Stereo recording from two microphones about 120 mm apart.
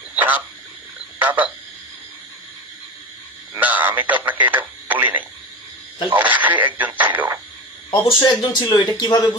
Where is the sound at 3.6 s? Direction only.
15° right (ahead or behind).